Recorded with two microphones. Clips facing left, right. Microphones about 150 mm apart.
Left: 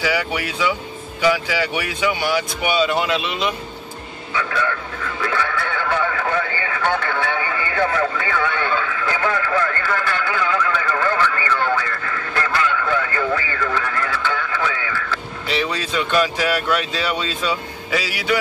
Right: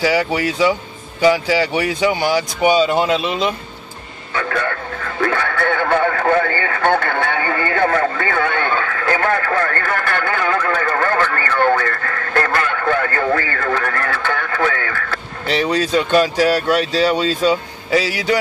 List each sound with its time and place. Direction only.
0.0 s speech: 40° right (ahead or behind)
4.3 s radio: 50° right (ahead or behind)
15.5 s speech: 40° right (ahead or behind)